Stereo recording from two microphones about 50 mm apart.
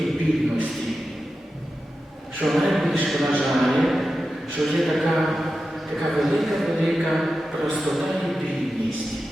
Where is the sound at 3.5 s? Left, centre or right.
Centre.